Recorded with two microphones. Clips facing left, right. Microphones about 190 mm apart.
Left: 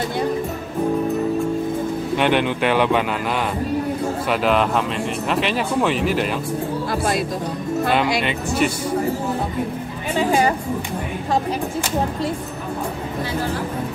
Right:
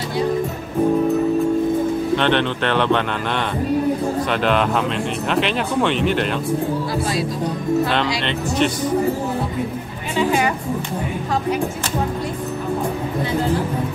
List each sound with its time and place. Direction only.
2.1 s speech: 10° left (ahead or behind)
4.3 s speech: 5° left (ahead or behind)
8.2 s speech: 5° left (ahead or behind)
10.1 s speech: 35° left (ahead or behind)